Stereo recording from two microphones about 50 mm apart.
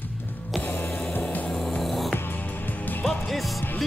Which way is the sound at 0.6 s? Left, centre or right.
Left.